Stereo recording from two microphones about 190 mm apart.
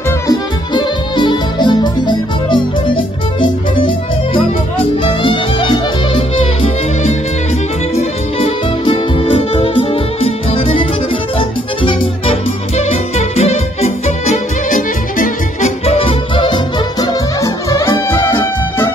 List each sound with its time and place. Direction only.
0.3 s music: 25° left (ahead or behind)
7.9 s music: 30° left (ahead or behind)
15.8 s music: 30° left (ahead or behind)
17.0 s music: 15° left (ahead or behind)